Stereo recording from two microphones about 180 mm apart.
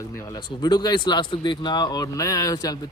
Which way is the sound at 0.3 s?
25° left (ahead or behind).